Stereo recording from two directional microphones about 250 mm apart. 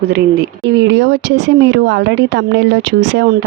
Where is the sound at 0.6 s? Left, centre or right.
Right.